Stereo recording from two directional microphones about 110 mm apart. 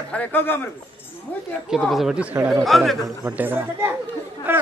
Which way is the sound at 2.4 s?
30° right (ahead or behind).